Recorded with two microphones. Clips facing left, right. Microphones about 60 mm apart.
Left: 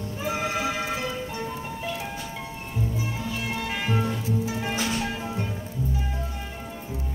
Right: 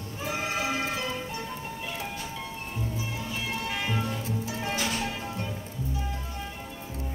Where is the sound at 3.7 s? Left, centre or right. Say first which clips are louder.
Left 5 dB; left.